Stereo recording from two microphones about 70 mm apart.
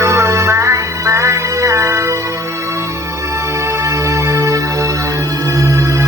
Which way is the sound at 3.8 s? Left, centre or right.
Right.